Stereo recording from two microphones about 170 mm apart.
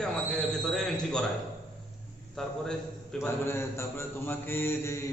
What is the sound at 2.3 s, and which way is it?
Speech, 5° left (ahead or behind).